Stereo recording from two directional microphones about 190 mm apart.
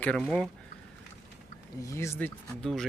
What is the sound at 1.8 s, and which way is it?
Speech, 15° left (ahead or behind).